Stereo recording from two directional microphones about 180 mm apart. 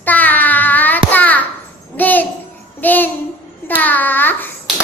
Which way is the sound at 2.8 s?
10° left (ahead or behind).